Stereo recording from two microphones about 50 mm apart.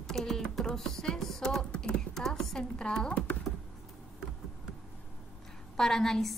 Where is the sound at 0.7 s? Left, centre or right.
Centre.